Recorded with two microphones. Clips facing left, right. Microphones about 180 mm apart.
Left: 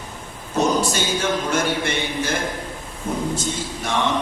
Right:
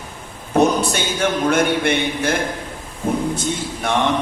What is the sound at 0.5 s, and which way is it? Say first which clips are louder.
A man's voice: right 4 dB; 60° right (ahead or behind).